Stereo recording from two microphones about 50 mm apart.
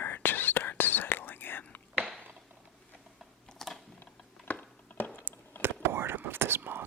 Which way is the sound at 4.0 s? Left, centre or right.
Left.